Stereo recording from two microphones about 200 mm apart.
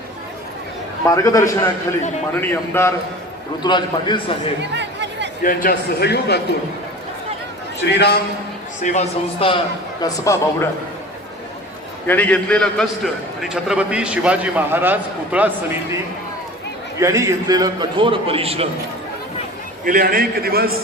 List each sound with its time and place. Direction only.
1.0 s a man's voice: 15° left (ahead or behind)
3.6 s a man's voice: 20° left (ahead or behind)
4.7 s chatter: 60° right (ahead or behind)
5.4 s a man's voice: 45° left (ahead or behind)
7.9 s a man's voice: 55° left (ahead or behind)
8.8 s speech: 35° left (ahead or behind)
10.0 s a man's voice: 15° left (ahead or behind)
12.0 s a man's voice: 10° left (ahead or behind); by 15.8 s 10° right (ahead or behind)
17.0 s a man's voice: 15° right (ahead or behind)
19.8 s a man's voice: 45° right (ahead or behind)